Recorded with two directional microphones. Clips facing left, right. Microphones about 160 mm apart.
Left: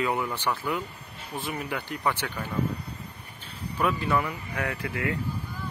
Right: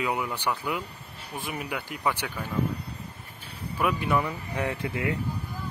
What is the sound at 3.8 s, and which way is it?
Speech, 15° right (ahead or behind).